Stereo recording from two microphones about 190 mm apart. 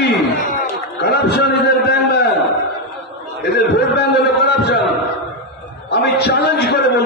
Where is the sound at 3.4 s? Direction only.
60° left (ahead or behind).